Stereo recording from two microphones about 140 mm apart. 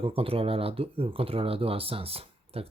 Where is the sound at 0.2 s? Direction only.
40° right (ahead or behind).